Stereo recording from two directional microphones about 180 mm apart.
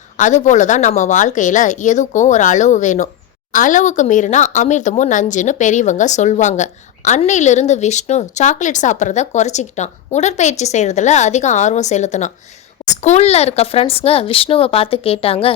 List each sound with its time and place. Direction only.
0.2 s a woman's voice: 45° left (ahead or behind)